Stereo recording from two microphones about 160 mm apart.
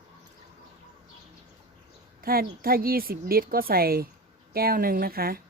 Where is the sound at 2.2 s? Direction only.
65° right (ahead or behind).